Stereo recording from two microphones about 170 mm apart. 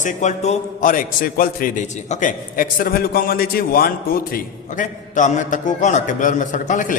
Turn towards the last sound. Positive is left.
turn(degrees=50)  # may be behind; listen again after turning